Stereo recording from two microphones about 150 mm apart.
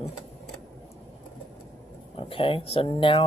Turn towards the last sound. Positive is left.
turn(degrees=40)  # may be behind; listen again after turning